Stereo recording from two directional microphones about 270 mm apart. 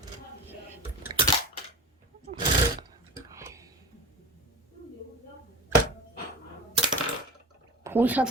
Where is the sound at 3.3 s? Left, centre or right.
Centre.